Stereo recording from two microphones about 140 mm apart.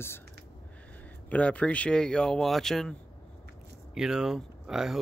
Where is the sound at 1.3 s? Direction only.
10° left (ahead or behind).